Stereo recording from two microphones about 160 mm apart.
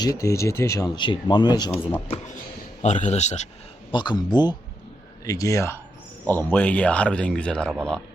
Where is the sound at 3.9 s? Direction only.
25° left (ahead or behind); by 7.8 s 5° left (ahead or behind).